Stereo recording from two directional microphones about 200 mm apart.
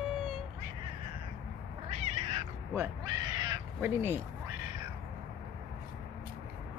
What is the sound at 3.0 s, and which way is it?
Crow, 20° right (ahead or behind).